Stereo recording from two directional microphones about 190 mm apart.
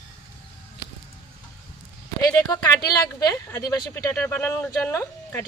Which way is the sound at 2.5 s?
20° left (ahead or behind).